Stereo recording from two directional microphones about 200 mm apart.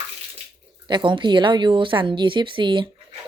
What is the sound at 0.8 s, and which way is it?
A woman's voice, 25° right (ahead or behind).